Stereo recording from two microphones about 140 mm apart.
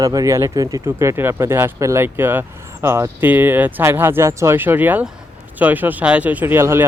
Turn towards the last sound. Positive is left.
turn(degrees=-15)  # may be behind; listen again after turning